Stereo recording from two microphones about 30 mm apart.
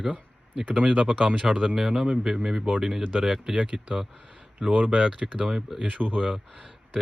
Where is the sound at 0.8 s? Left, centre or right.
Right.